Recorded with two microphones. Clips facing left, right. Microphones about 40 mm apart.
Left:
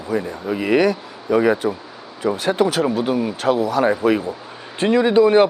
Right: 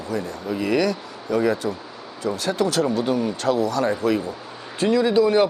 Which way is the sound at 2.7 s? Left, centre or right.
Centre.